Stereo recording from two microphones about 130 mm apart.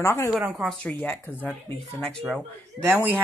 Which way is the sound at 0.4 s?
10° right (ahead or behind).